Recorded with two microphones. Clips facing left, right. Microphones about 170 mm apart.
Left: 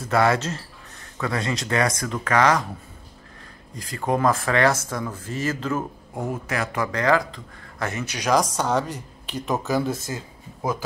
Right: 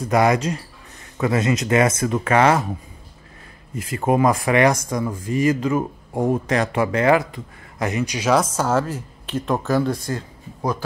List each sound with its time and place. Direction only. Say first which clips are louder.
0.0 s speech: right 3 dB; 15° right (ahead or behind)
3.9 s speech: right 4 dB; 20° right (ahead or behind)
6.1 s speech: right 8 dB; 35° right (ahead or behind); by 10.8 s 5° left (ahead or behind)